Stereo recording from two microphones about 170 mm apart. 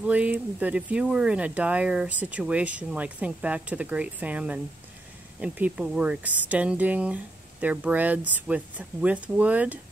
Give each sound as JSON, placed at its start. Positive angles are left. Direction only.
{"t": 0.0, "sound": "speech", "side_deg": -10}